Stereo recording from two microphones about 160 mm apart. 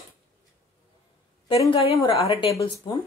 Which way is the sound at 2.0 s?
35° left (ahead or behind).